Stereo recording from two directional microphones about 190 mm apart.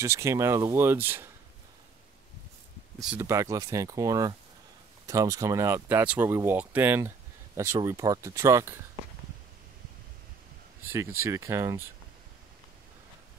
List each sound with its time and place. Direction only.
0.0 s speech: 15° right (ahead or behind)
3.2 s speech: 15° right (ahead or behind)
11.2 s speech: 15° right (ahead or behind)